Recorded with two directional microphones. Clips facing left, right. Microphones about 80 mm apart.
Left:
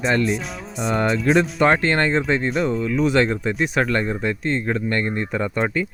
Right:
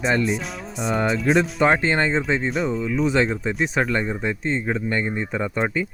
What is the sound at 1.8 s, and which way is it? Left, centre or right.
Speech, centre.